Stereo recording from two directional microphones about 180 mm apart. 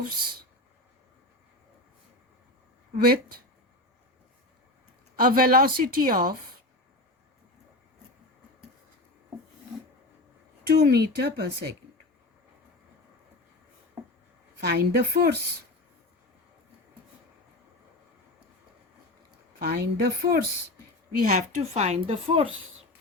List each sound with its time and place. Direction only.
2.9 s speech: 55° right (ahead or behind)
5.2 s speech: 55° right (ahead or behind)
10.7 s speech: 60° right (ahead or behind)
14.6 s speech: 60° right (ahead or behind)
19.5 s speech: 60° right (ahead or behind)
21.2 s a woman's voice: 45° right (ahead or behind)